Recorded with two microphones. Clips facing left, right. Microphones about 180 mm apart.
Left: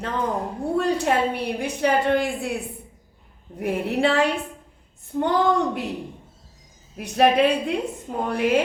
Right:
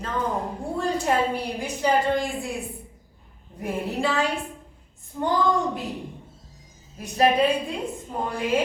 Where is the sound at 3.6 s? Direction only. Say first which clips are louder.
Left 4 dB; 65° left (ahead or behind).